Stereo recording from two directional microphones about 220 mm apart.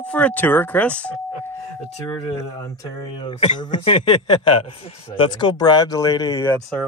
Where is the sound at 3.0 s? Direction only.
20° left (ahead or behind).